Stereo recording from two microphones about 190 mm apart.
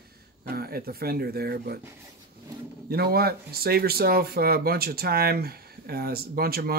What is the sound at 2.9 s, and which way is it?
Speech, 55° right (ahead or behind).